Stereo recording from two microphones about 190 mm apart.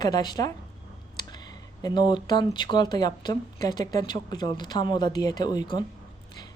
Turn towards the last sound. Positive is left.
turn(degrees=25)  # may be behind; listen again after turning